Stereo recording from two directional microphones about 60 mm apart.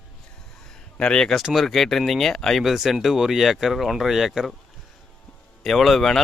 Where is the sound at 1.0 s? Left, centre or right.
Centre.